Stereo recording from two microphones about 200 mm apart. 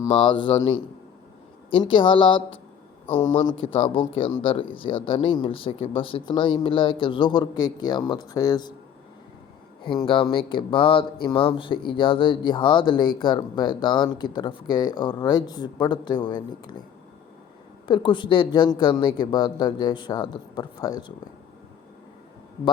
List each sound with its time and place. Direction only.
0.0 s speech: 25° left (ahead or behind)
9.8 s speech: 25° left (ahead or behind)
17.8 s speech: 25° left (ahead or behind)